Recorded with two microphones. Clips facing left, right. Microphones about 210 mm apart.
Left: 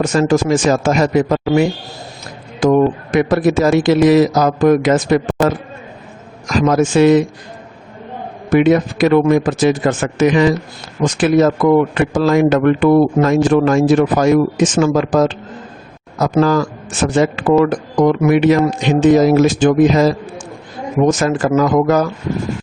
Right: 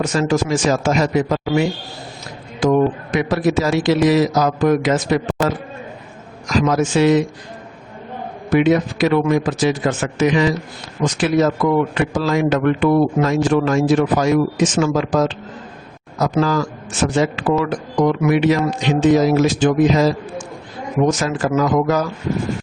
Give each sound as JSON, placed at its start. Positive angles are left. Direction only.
{"t": 0.0, "sound": "a man's voice", "side_deg": 50}
{"t": 6.5, "sound": "a man's voice", "side_deg": 50}
{"t": 8.4, "sound": "a man's voice", "side_deg": 50}
{"t": 21.2, "sound": "a man's voice", "side_deg": 50}